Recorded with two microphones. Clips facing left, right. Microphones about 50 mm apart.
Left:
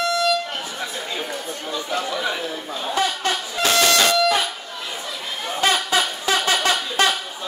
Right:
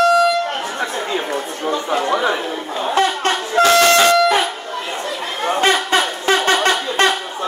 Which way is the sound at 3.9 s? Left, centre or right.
Right.